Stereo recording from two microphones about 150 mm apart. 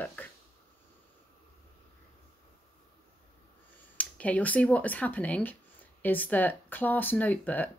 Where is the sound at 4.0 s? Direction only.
10° left (ahead or behind).